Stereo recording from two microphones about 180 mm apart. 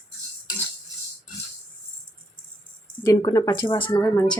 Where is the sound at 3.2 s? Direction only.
20° left (ahead or behind).